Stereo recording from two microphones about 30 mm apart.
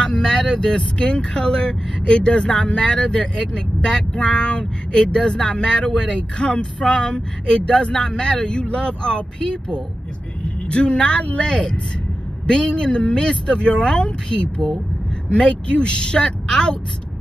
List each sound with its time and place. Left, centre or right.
0.0 s speech: left